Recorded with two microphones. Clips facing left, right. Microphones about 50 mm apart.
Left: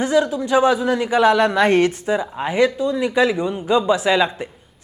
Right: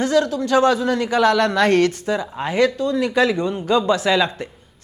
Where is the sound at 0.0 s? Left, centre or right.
Centre.